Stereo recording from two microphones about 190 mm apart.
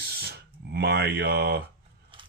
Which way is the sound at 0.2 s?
60° right (ahead or behind).